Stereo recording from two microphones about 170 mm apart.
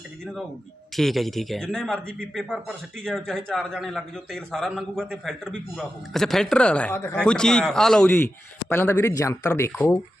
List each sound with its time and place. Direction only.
0.9 s speech: centre (ahead or behind)